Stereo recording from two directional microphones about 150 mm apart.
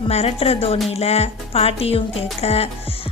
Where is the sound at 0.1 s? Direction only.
45° left (ahead or behind).